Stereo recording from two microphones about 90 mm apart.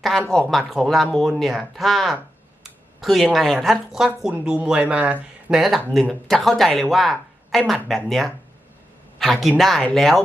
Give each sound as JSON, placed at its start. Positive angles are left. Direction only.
{"t": 0.0, "sound": "speech", "side_deg": 5}